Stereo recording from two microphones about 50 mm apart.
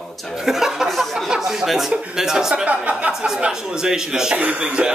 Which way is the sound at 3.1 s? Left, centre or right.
Centre.